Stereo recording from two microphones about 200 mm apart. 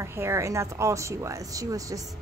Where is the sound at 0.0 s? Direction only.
15° right (ahead or behind).